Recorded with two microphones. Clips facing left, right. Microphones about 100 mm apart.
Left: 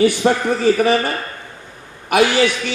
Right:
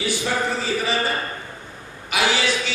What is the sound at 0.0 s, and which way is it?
Speech, 55° left (ahead or behind).